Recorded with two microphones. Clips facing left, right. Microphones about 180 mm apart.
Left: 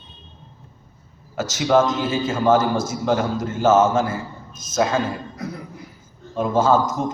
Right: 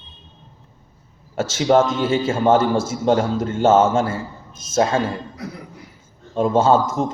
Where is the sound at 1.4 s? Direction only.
30° right (ahead or behind).